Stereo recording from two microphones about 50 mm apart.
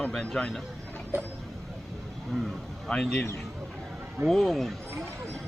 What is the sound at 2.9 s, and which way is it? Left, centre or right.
Speech, centre.